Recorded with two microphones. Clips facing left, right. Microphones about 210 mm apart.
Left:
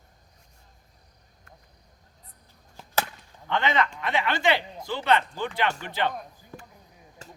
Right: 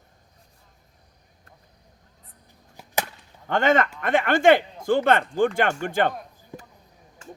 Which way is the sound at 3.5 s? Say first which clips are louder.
Right 5 dB; 45° right (ahead or behind).